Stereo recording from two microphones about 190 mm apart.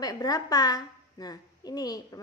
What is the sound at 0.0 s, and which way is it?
A woman's voice, 20° left (ahead or behind).